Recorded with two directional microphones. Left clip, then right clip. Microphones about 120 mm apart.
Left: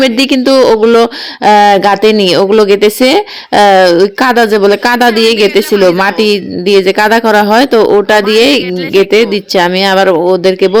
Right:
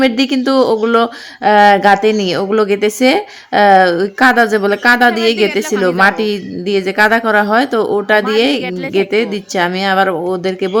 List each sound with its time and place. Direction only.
0.0 s speech: 40° left (ahead or behind)